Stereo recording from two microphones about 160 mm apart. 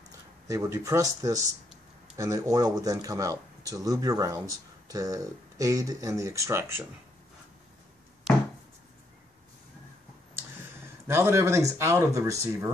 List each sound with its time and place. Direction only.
0.5 s speech: 20° right (ahead or behind)
11.1 s speech: 15° right (ahead or behind)